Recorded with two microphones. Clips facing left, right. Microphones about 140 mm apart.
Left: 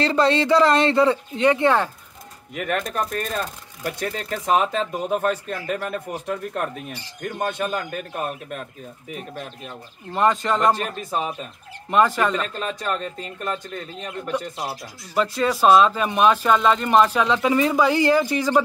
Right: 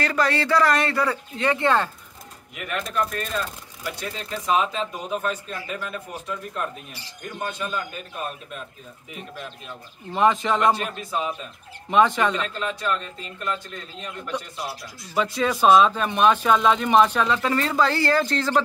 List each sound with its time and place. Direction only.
0.0 s speech: 25° left (ahead or behind)
2.5 s speech: 45° left (ahead or behind)
10.1 s speech: centre (ahead or behind)
11.0 s speech: 40° left (ahead or behind)
11.9 s speech: centre (ahead or behind)
12.5 s speech: 40° left (ahead or behind)
15.1 s speech: centre (ahead or behind)
17.3 s speech: 15° left (ahead or behind)